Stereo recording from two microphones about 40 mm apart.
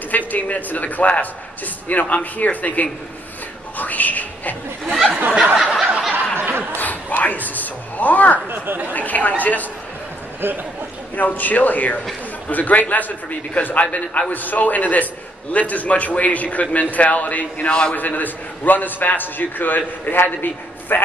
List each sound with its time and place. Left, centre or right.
0.3 s a man's voice: left
4.8 s speech: centre
5.6 s snicker: centre
6.3 s laughter: right
6.8 s a sound: left
8.5 s speech: right
8.9 s a man's voice: left
10.4 s speech: right
11.1 s a man's voice: left
17.6 s a man's voice: left
17.9 s a man's voice: left